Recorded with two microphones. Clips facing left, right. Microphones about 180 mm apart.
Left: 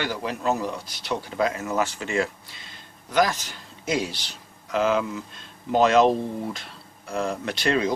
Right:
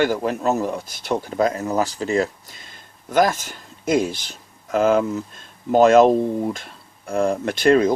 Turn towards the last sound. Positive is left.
turn(degrees=-50)  # may be behind; listen again after turning